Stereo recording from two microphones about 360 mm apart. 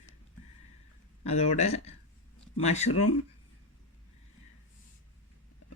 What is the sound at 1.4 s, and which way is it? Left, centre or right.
Speech, centre.